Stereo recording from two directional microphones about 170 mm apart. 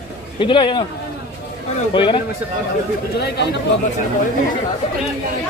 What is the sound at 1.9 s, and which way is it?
Speech, 30° left (ahead or behind).